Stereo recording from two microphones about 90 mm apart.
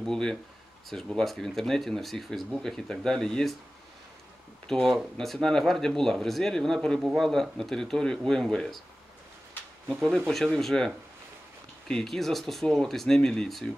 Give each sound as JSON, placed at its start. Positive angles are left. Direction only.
{"t": 0.0, "sound": "speech", "side_deg": 5}
{"t": 4.6, "sound": "speech", "side_deg": 5}
{"t": 9.8, "sound": "speech", "side_deg": -15}
{"t": 10.1, "sound": "speech", "side_deg": 0}